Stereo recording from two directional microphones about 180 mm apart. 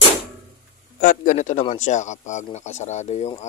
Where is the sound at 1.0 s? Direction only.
50° left (ahead or behind).